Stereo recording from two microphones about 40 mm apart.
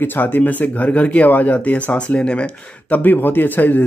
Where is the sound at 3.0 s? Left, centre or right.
Left.